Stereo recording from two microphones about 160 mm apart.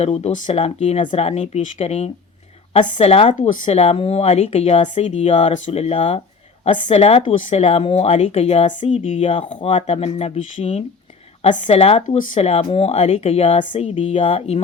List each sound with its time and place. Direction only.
0.0 s speech: 40° left (ahead or behind)
9.6 s speech: 40° left (ahead or behind)